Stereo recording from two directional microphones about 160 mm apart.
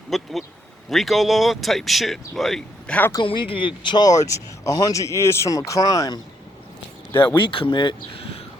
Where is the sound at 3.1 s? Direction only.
30° left (ahead or behind).